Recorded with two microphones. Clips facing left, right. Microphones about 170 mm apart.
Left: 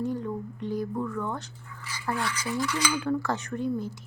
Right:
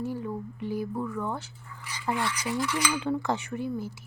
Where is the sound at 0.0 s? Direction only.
5° right (ahead or behind).